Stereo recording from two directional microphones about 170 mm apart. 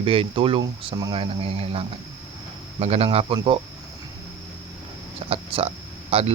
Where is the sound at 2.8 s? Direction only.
35° right (ahead or behind).